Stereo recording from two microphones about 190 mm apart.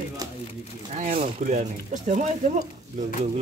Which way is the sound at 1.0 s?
40° right (ahead or behind).